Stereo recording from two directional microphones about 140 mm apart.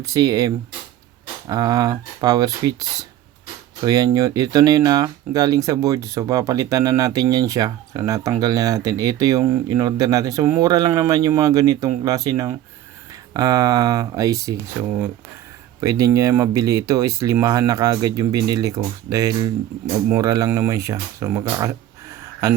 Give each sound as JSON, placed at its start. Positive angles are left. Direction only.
{"t": 0.0, "sound": "speech", "side_deg": -25}
{"t": 15.8, "sound": "speech", "side_deg": -25}